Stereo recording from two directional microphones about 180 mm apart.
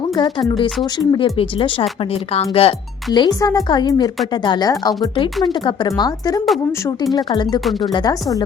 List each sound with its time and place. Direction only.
0.2 s speech: 25° left (ahead or behind)